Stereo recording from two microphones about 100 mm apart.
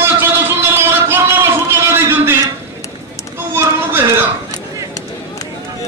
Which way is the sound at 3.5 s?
25° right (ahead or behind).